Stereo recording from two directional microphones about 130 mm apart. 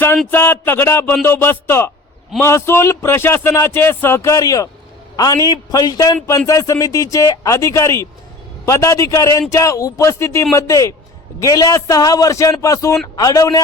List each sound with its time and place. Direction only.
0.3 s a man's voice: 15° left (ahead or behind)